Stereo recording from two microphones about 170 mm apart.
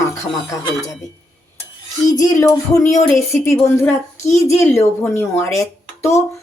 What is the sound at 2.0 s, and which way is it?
Music, 20° left (ahead or behind).